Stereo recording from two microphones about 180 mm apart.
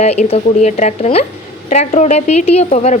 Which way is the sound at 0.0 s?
35° left (ahead or behind).